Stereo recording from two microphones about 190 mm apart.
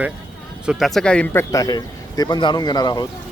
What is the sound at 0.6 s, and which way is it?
A man's voice, 5° right (ahead or behind).